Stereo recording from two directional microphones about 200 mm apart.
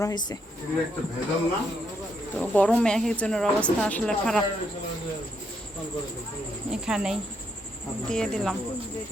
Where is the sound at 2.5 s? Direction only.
5° left (ahead or behind).